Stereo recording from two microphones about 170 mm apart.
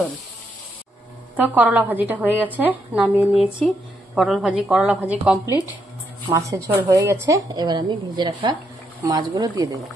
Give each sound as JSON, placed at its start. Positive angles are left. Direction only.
{"t": 1.3, "sound": "a woman's voice", "side_deg": -10}